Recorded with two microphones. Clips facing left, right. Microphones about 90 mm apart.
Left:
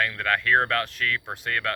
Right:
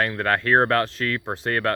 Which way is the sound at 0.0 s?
35° right (ahead or behind).